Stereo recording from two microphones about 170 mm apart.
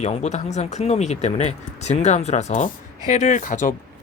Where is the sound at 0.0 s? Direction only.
40° left (ahead or behind).